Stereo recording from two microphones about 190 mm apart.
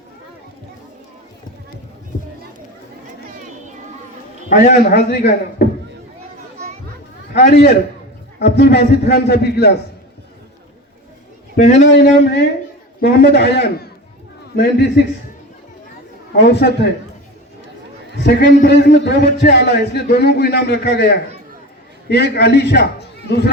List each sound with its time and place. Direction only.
4.4 s a man's voice: 40° left (ahead or behind)
4.8 s a man's voice: 55° left (ahead or behind)
7.3 s a man's voice: 60° left (ahead or behind)
11.5 s a man's voice: 40° left (ahead or behind)
11.8 s a man's voice: 65° left (ahead or behind)
16.3 s a man's voice: 60° left (ahead or behind)
18.2 s a man's voice: 60° left (ahead or behind)